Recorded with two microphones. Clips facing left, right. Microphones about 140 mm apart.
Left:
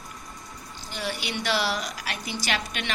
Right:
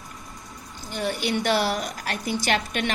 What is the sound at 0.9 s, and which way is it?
A woman's voice, 50° right (ahead or behind).